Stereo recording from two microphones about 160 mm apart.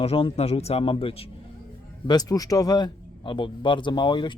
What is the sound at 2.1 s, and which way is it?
A man's voice, 25° left (ahead or behind).